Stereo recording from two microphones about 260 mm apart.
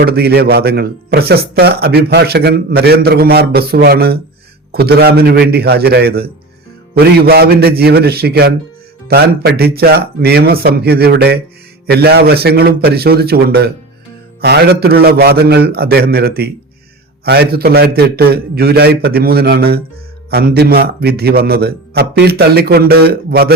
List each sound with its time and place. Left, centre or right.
0.0 s speech: right